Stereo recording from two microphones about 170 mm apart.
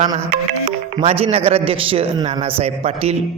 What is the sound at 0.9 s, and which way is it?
Speech, 35° right (ahead or behind).